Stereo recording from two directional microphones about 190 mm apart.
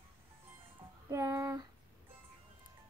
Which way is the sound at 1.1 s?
15° right (ahead or behind).